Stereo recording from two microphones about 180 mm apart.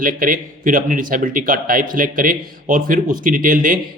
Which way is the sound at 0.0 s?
50° right (ahead or behind).